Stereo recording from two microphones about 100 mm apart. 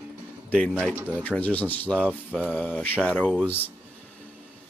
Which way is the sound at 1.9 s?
15° right (ahead or behind).